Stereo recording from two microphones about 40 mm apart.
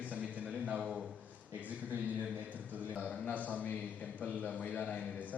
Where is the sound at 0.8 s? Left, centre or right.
Centre.